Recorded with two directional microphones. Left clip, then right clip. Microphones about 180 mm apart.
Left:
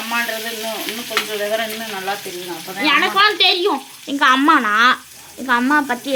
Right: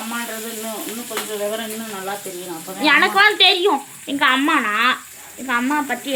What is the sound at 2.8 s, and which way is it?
Frying, centre (ahead or behind).